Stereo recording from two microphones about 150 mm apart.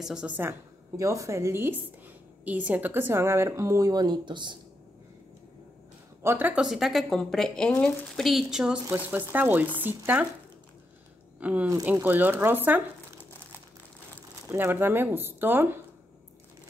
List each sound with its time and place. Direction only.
0.0 s speech: 5° right (ahead or behind)
0.4 s a woman's voice: 20° right (ahead or behind)
6.2 s a woman's voice: 10° right (ahead or behind)
11.3 s a woman's voice: 10° right (ahead or behind)
14.5 s a woman's voice: 15° right (ahead or behind)